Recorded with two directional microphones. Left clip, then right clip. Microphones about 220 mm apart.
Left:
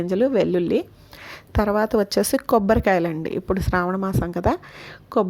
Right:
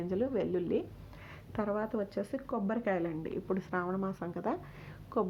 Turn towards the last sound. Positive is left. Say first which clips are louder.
# left 12 dB
turn(degrees=35)  # may be behind; listen again after turning